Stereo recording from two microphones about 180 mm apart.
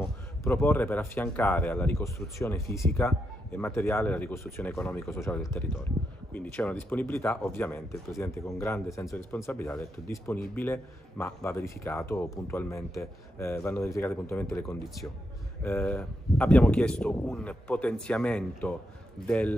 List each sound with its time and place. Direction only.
0.4 s a man's voice: 15° left (ahead or behind)